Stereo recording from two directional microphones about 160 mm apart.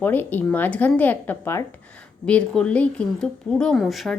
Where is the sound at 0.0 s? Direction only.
10° left (ahead or behind).